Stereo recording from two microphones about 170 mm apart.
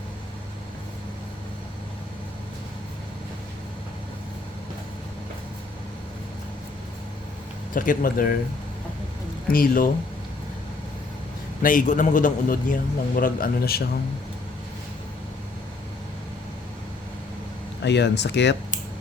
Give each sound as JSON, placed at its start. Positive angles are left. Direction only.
{"t": 7.7, "sound": "speech", "side_deg": 50}
{"t": 9.5, "sound": "speech", "side_deg": 55}
{"t": 11.6, "sound": "a man's voice", "side_deg": 55}
{"t": 17.8, "sound": "speech", "side_deg": 90}